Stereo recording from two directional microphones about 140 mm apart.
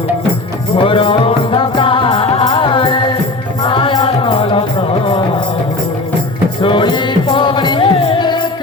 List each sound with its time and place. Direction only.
0.8 s music: 40° left (ahead or behind)
6.6 s music: 35° left (ahead or behind)